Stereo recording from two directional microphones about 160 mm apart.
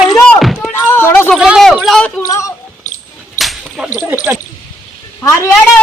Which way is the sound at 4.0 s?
10° right (ahead or behind).